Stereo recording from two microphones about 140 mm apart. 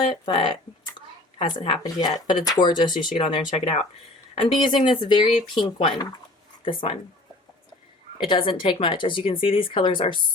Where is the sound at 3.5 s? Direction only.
45° left (ahead or behind).